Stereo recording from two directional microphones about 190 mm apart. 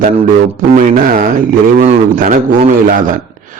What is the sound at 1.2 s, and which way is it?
A man's voice, 45° right (ahead or behind).